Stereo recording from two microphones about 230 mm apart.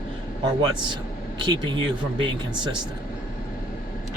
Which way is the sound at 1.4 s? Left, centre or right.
Centre.